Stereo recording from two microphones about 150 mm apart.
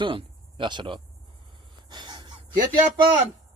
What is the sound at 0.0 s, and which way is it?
Speech, 35° right (ahead or behind).